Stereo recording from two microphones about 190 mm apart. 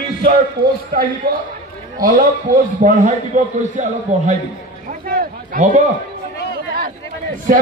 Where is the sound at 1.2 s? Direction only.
50° right (ahead or behind).